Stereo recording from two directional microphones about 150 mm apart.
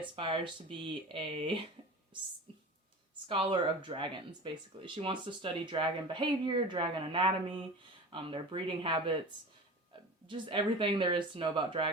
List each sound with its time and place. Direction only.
0.0 s speech: 35° right (ahead or behind)
2.5 s a sound: 35° right (ahead or behind)
3.2 s speech: 35° right (ahead or behind)
10.2 s speech: 35° right (ahead or behind)